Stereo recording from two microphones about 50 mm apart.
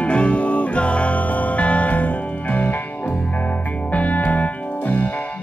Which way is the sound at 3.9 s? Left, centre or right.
Left.